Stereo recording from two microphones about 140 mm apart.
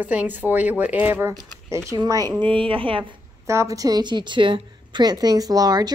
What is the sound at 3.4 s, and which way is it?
A woman's voice, 20° right (ahead or behind).